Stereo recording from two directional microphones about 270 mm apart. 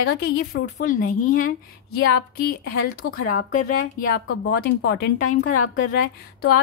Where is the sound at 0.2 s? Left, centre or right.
Left.